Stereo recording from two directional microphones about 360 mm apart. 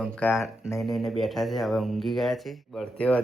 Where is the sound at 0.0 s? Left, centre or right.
Centre.